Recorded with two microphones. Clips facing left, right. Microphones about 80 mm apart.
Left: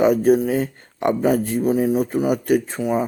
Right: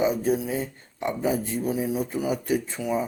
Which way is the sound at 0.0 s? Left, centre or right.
Left.